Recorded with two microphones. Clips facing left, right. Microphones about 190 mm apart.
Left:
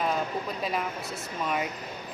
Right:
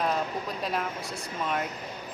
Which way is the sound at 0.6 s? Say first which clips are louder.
Even; centre (ahead or behind).